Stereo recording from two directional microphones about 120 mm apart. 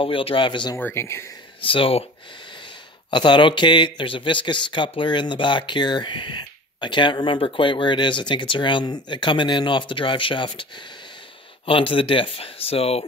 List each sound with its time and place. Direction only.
0.0 s speech: 50° left (ahead or behind)
0.7 s speech: 20° left (ahead or behind)
1.6 s speech: 45° left (ahead or behind)
3.1 s a man's voice: 40° left (ahead or behind)